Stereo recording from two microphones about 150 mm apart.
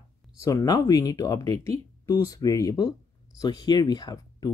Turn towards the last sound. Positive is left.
turn(degrees=25)  # may be behind; listen again after turning